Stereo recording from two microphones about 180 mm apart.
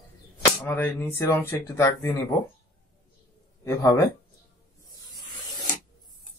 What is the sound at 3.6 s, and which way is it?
Speech, 20° left (ahead or behind).